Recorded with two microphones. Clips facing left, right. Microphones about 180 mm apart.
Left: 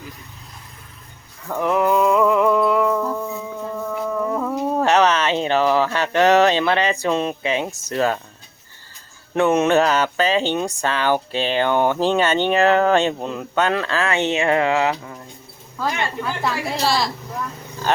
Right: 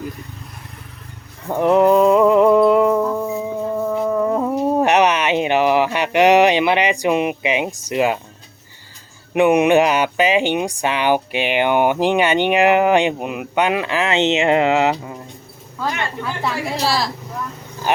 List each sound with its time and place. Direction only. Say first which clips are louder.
1.5 s a sound: right 5 dB; 25° right (ahead or behind)
9.3 s speech: right 3 dB; 15° right (ahead or behind)
16.2 s a woman's voice: right 2 dB; centre (ahead or behind)
17.9 s speech: right 1 dB; 15° right (ahead or behind)